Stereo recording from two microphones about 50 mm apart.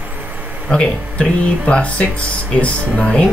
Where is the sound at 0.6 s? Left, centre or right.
Centre.